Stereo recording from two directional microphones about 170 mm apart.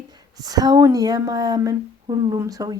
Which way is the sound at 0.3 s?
20° right (ahead or behind).